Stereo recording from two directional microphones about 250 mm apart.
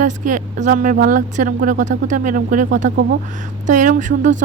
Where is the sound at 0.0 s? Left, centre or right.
Right.